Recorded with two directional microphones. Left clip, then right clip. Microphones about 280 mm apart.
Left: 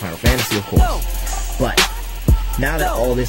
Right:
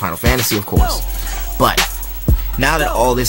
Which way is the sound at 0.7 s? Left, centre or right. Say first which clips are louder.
Even; right.